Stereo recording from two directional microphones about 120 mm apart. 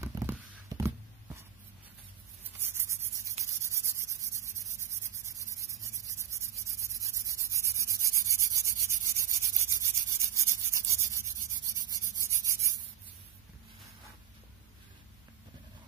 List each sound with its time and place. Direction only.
0.0 s a sound: 25° right (ahead or behind)
2.5 s rub: 20° right (ahead or behind)
4.0 s a sound: 25° right (ahead or behind)
6.2 s rub: 25° right (ahead or behind)
7.0 s sanding: 25° right (ahead or behind)
8.5 s rub: 25° right (ahead or behind)